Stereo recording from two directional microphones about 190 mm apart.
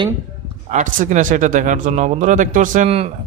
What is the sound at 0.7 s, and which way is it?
A man's voice, 40° right (ahead or behind).